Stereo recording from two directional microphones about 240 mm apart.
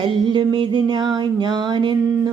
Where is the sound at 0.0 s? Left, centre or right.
Centre.